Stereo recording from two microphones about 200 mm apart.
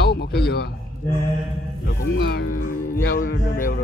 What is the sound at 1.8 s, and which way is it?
Speech, 50° left (ahead or behind).